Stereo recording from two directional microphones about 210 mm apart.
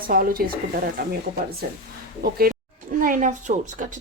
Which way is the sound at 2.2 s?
45° right (ahead or behind).